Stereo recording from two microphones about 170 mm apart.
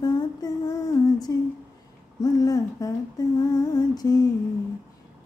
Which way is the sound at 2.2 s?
20° left (ahead or behind).